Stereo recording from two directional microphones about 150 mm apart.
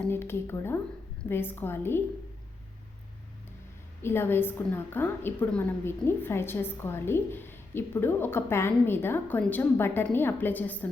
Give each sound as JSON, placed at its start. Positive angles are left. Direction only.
{"t": 0.0, "sound": "a woman's voice", "side_deg": 15}
{"t": 4.0, "sound": "a woman's voice", "side_deg": 15}